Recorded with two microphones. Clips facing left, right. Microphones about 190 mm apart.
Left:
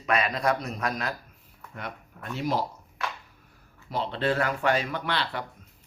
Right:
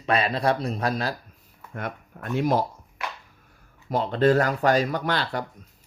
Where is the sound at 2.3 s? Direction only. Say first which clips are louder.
Right 5 dB; 50° right (ahead or behind).